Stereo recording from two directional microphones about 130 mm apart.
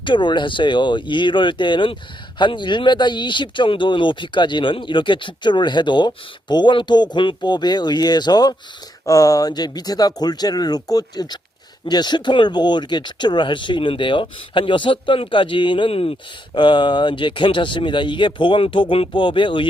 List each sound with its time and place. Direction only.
0.0 s speech: 40° left (ahead or behind)
16.6 s speech: 35° left (ahead or behind)